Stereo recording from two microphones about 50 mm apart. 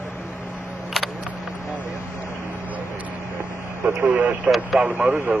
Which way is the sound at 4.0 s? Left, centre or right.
Right.